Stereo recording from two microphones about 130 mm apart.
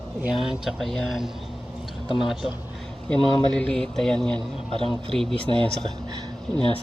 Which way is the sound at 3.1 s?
10° left (ahead or behind).